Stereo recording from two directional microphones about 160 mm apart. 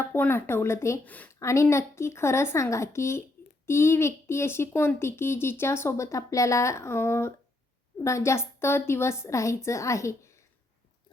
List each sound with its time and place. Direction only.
0.0 s a woman's voice: 15° left (ahead or behind)